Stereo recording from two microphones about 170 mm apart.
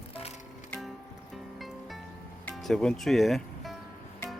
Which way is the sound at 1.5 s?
Centre (ahead or behind).